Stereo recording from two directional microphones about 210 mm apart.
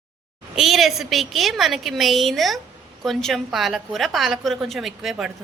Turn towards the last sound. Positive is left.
turn(degrees=0)  # may be behind; listen again after turning